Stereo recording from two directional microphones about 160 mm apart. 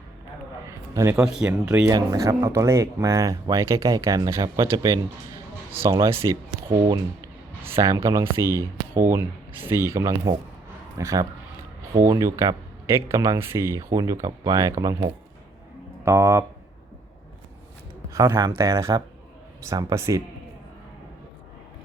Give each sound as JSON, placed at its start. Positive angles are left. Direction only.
{"t": 0.9, "sound": "speech", "side_deg": -20}
{"t": 1.2, "sound": "speech", "side_deg": -10}
{"t": 1.9, "sound": "speech", "side_deg": -25}
{"t": 6.7, "sound": "speech", "side_deg": -30}
{"t": 7.6, "sound": "speech", "side_deg": -20}
{"t": 16.0, "sound": "speech", "side_deg": -15}
{"t": 18.1, "sound": "speech", "side_deg": -20}